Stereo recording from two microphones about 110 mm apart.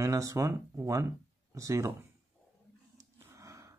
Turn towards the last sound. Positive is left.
turn(degrees=-30)  # may be behind; listen again after turning